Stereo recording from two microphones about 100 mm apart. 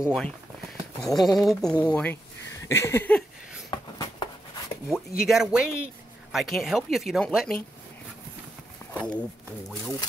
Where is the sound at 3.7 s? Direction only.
50° left (ahead or behind).